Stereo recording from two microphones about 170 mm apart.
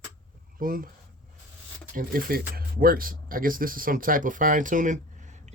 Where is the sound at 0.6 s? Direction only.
55° right (ahead or behind).